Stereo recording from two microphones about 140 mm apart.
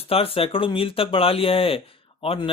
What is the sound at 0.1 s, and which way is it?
Speech, 45° left (ahead or behind).